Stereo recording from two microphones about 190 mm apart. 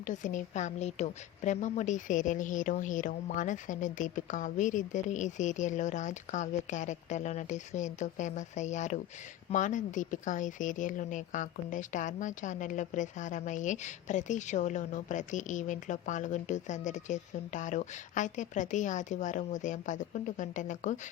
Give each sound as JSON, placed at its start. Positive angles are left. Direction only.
{"t": 0.0, "sound": "speech", "side_deg": 40}